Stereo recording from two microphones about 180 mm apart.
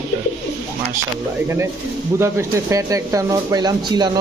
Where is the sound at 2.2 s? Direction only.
15° right (ahead or behind).